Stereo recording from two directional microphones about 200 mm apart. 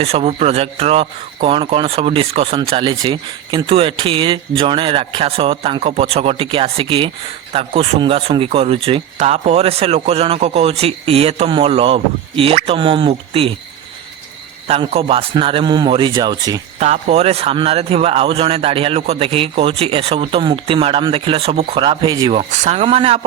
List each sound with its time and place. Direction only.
0.0 s speech: 30° right (ahead or behind)
14.7 s speech: 30° right (ahead or behind)
16.8 s speech: 35° right (ahead or behind)